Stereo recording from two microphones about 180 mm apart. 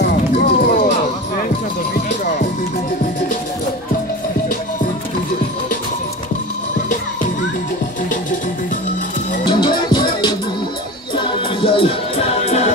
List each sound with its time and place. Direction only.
0.0 s music: 60° left (ahead or behind)
2.0 s music: 50° left (ahead or behind)
9.5 s music: 25° left (ahead or behind)